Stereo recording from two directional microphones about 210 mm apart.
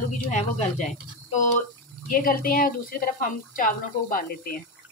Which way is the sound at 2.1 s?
40° left (ahead or behind).